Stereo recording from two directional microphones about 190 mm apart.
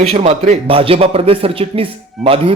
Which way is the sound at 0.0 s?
30° right (ahead or behind).